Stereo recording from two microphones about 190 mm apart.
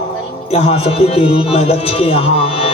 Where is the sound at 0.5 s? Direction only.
30° left (ahead or behind).